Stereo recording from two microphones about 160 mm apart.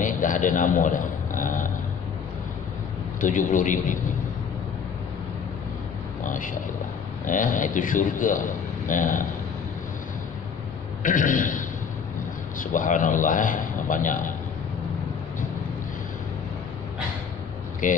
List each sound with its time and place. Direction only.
0.0 s a sound: 55° left (ahead or behind)
3.2 s a man's voice: 55° left (ahead or behind)
6.2 s a man's voice: 60° left (ahead or behind)
11.0 s a man's voice: 55° left (ahead or behind)
12.7 s a man's voice: 55° left (ahead or behind)
17.8 s speech: 50° left (ahead or behind)